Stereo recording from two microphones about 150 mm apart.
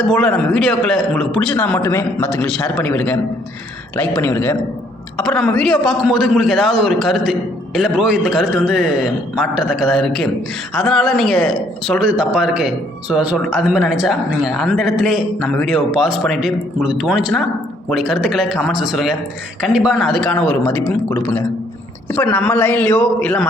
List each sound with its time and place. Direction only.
0.0 s speech: 5° left (ahead or behind)
1.5 s a man's voice: 10° left (ahead or behind)